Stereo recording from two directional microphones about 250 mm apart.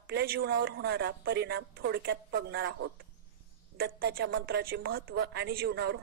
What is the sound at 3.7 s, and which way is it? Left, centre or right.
A woman's voice, right.